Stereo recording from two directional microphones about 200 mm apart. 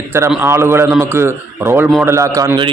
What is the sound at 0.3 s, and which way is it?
A man's voice, 10° right (ahead or behind).